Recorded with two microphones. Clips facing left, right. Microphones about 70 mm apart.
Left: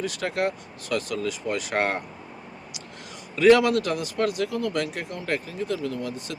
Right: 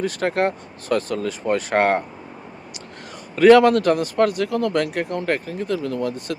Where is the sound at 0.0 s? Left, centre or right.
Right.